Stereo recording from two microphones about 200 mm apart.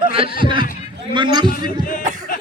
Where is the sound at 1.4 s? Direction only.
45° left (ahead or behind).